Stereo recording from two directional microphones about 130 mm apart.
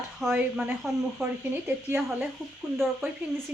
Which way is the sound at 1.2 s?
20° right (ahead or behind).